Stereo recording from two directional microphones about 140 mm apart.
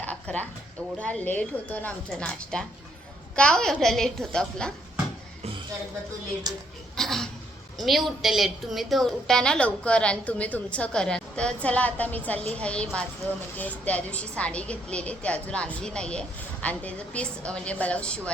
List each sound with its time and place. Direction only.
0.0 s a sound: 10° left (ahead or behind)
0.9 s a woman's voice: 10° left (ahead or behind)
6.5 s speech: 30° right (ahead or behind)
6.9 s a woman's voice: 5° left (ahead or behind)